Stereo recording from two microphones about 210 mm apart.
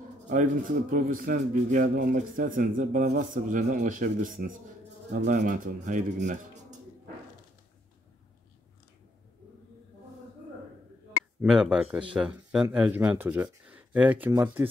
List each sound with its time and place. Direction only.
0.3 s a man's voice: 40° right (ahead or behind)
11.4 s speech: 5° right (ahead or behind)